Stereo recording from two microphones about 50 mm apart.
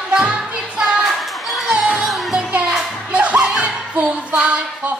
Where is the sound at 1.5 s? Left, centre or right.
Centre.